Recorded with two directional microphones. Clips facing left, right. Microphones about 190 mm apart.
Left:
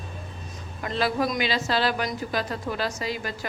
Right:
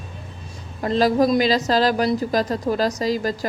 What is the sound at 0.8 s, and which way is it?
A woman's voice, 35° right (ahead or behind).